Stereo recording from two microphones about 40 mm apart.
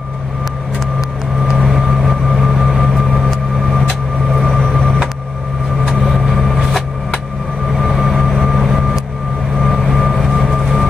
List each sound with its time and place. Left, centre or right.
1.4 s vehicle: centre
6.1 s vehicle: centre
7.7 s vehicle: centre